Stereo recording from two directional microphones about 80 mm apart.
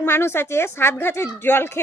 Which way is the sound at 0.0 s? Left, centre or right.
Left.